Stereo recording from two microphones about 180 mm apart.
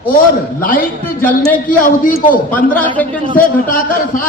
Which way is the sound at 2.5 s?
10° left (ahead or behind).